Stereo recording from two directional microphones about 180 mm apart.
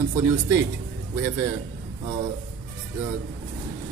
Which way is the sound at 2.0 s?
20° right (ahead or behind).